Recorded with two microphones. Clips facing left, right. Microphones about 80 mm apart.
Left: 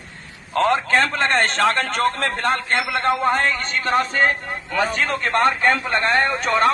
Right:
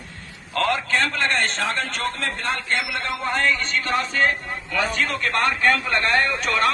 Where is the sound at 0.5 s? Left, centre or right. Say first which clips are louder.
Left 4 dB; left.